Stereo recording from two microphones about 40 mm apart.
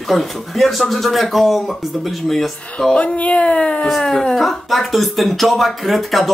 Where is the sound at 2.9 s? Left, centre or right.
Left.